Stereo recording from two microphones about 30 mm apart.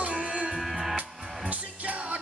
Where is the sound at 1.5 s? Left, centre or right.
Right.